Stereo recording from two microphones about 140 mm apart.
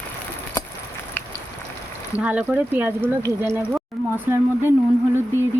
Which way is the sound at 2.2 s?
10° right (ahead or behind).